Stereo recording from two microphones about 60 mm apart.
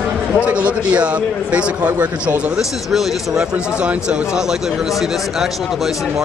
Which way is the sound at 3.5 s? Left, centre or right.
Centre.